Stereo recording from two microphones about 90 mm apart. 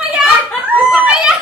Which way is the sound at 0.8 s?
15° right (ahead or behind).